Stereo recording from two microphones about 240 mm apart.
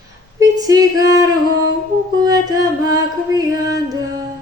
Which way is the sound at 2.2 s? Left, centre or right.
Centre.